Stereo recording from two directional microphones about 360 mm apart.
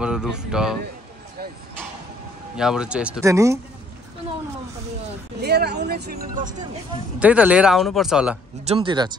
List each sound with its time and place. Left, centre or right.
0.0 s speech: centre
2.5 s speech: centre
5.4 s speech: right
7.2 s speech: centre
8.6 s speech: centre